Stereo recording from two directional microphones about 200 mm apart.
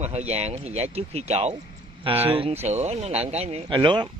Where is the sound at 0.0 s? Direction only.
35° right (ahead or behind).